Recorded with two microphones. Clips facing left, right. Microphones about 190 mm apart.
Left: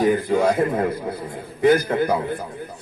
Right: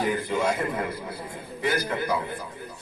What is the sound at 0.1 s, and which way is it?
Speech, 50° left (ahead or behind).